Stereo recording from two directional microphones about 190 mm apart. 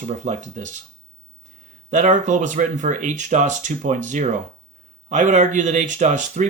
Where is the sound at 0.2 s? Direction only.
40° right (ahead or behind).